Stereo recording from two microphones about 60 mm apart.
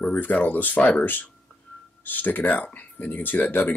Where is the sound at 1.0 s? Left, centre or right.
Left.